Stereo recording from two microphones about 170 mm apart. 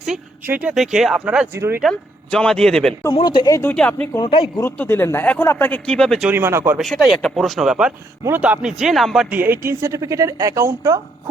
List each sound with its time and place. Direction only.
0.4 s speech: 10° right (ahead or behind)
1.8 s speech: 5° left (ahead or behind)
3.2 s speech: 30° left (ahead or behind); by 4.0 s 10° left (ahead or behind)
4.2 s speech: 30° left (ahead or behind)
4.6 s speech: 15° left (ahead or behind)
6.3 s speech: 15° right (ahead or behind)
6.7 s speech: centre (ahead or behind)
9.3 s speech: 10° right (ahead or behind)